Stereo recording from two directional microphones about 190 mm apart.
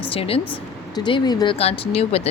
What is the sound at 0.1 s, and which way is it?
A woman's voice, 30° left (ahead or behind).